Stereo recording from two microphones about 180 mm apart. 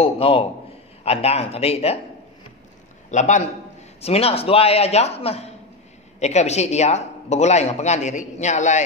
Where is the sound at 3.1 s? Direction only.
40° left (ahead or behind).